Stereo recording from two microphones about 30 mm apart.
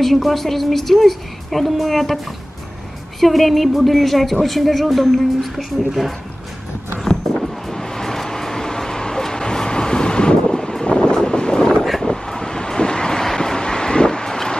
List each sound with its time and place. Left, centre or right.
0.0 s a woman's voice: centre
3.2 s a woman's voice: centre
7.3 s vehicle: centre